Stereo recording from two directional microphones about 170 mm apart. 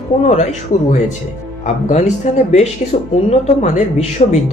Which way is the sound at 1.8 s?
45° left (ahead or behind).